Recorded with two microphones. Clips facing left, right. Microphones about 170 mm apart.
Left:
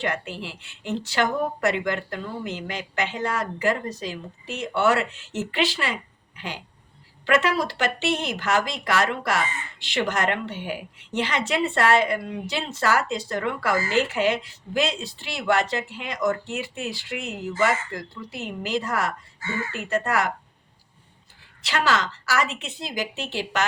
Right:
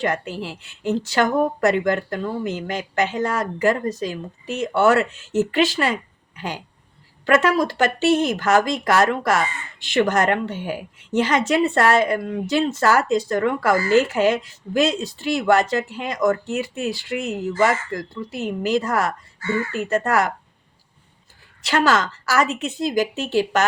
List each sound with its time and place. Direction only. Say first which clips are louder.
0.0 s a woman's voice: right 5 dB; 40° right (ahead or behind)
21.6 s a woman's voice: right 5 dB; 45° right (ahead or behind)